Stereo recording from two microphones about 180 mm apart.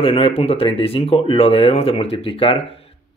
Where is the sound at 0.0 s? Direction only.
30° left (ahead or behind).